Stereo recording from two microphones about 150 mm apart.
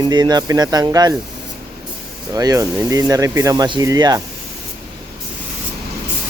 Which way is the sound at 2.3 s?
20° right (ahead or behind).